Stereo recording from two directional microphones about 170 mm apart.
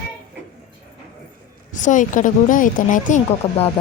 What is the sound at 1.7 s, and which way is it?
Speech, 50° left (ahead or behind).